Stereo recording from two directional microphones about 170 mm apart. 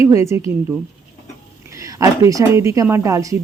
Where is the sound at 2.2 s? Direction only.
20° right (ahead or behind).